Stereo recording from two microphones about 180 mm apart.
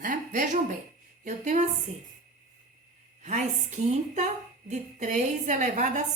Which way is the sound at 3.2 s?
40° right (ahead or behind).